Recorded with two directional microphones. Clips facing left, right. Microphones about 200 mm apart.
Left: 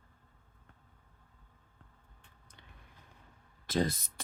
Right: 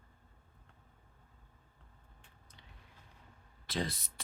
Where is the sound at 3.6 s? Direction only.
45° left (ahead or behind).